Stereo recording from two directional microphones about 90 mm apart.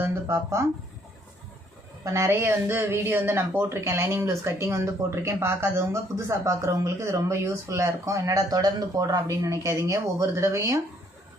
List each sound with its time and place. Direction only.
0.0 s speech: 25° right (ahead or behind)
2.0 s a woman's voice: 30° right (ahead or behind)